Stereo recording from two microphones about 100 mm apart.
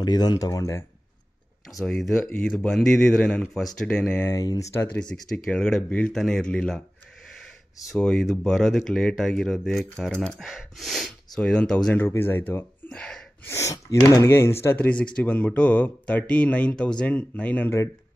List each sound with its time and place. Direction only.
0.0 s speech: 45° left (ahead or behind)
2.0 s speech: centre (ahead or behind)
4.2 s speech: 30° left (ahead or behind)
4.7 s speech: 15° left (ahead or behind)
7.9 s speech: 5° left (ahead or behind)
11.9 s speech: 20° left (ahead or behind)
12.9 s speech: 5° left (ahead or behind)
13.5 s speech: 30° left (ahead or behind)